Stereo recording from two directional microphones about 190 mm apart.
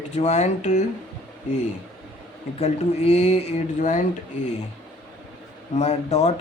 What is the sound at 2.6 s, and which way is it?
Speech, 35° left (ahead or behind).